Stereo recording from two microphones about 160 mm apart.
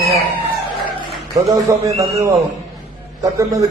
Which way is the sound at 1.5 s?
20° right (ahead or behind).